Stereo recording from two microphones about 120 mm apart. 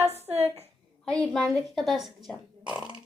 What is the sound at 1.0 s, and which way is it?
A woman's voice, 5° left (ahead or behind).